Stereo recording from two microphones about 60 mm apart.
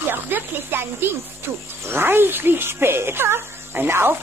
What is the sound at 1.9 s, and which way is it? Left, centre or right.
Speech, right.